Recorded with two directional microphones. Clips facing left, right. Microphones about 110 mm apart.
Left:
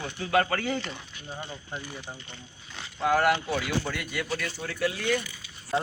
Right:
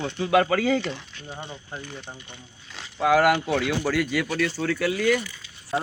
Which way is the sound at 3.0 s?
90° right.